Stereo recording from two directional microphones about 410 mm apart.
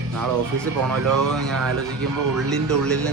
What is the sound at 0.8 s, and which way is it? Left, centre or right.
Speech, right.